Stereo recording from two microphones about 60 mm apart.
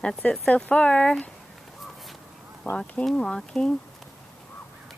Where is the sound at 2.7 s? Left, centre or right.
Left.